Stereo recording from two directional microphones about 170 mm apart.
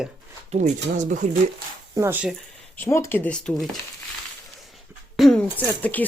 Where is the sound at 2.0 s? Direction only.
10° right (ahead or behind).